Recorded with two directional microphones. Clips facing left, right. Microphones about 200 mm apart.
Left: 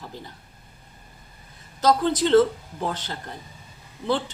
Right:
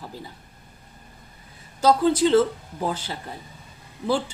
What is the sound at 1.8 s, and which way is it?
Speech, 10° right (ahead or behind).